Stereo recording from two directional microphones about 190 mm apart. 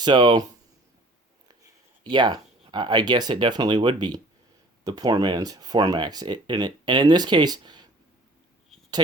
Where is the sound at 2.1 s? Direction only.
25° right (ahead or behind).